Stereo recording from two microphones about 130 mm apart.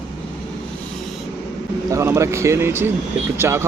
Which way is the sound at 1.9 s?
20° right (ahead or behind).